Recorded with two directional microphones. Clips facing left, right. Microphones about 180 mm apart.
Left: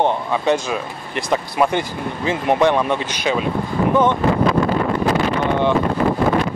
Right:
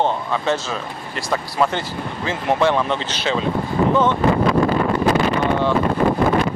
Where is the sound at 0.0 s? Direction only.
15° left (ahead or behind).